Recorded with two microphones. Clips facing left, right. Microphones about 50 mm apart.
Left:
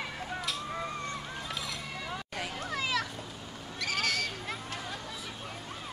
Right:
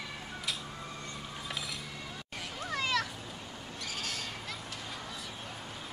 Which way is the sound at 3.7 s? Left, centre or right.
Left.